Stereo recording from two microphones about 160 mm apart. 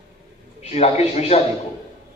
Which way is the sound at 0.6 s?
40° left (ahead or behind).